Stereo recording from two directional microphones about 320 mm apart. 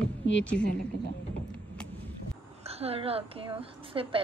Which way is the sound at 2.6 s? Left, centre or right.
Centre.